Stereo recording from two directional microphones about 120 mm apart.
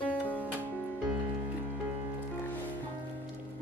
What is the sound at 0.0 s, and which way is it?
Music, 15° left (ahead or behind).